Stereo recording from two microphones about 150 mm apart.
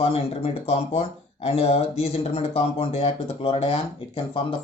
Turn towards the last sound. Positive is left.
turn(degrees=40)  # may be behind; listen again after turning